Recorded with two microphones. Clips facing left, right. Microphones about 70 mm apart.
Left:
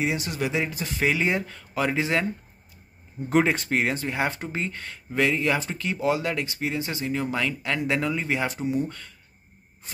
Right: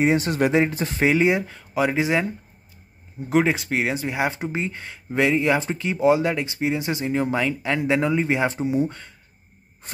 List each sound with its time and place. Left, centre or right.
0.0 s speech: right
1.2 s speech: centre
3.3 s speech: centre; by 9.1 s right